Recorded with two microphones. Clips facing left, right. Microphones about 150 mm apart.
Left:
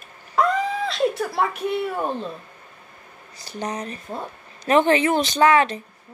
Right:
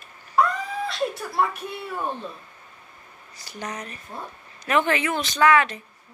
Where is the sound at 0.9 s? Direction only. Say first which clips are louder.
Left 5 dB; 90° left.